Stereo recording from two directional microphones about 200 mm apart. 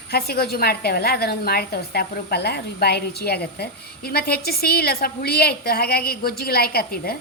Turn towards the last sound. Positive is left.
turn(degrees=50)  # may be behind; listen again after turning